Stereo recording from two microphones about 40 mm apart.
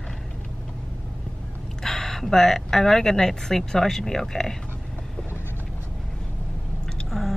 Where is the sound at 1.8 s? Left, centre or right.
Centre.